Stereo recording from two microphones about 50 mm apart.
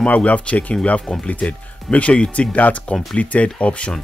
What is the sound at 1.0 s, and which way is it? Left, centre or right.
Speech, centre.